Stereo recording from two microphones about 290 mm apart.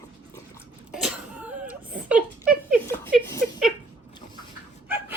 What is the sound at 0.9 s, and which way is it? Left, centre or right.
Cough, centre.